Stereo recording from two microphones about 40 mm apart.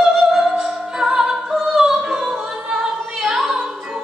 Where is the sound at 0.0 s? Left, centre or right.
Centre.